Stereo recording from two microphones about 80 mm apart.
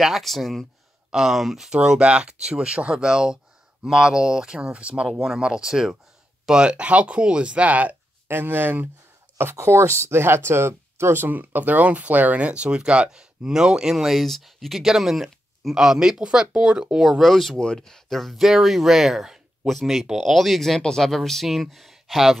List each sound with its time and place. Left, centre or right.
0.0 s speech: centre